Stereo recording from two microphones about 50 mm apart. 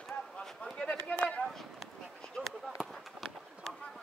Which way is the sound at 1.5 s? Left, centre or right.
Centre.